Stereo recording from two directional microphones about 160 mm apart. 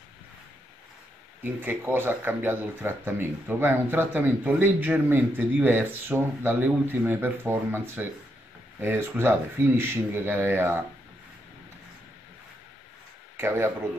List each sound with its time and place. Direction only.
1.4 s speech: 10° right (ahead or behind)
13.4 s speech: 15° right (ahead or behind)